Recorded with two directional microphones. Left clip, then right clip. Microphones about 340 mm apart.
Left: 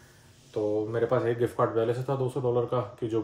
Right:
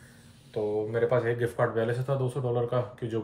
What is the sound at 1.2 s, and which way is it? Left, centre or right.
Speech, centre.